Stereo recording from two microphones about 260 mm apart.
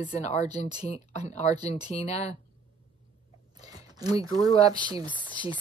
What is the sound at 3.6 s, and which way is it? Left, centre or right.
Speech, centre.